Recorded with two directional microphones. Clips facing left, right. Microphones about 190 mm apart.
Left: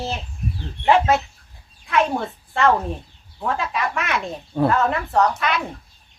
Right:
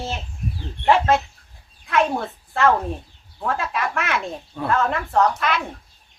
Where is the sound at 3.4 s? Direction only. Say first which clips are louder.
Left 1 dB; centre (ahead or behind).